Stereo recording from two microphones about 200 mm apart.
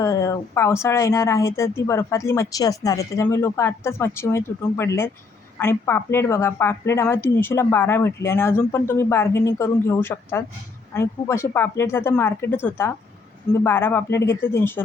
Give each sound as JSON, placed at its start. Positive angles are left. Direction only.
{"t": 0.0, "sound": "speech", "side_deg": 15}